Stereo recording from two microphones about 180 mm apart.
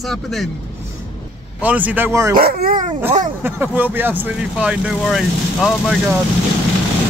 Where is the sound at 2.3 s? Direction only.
55° right (ahead or behind).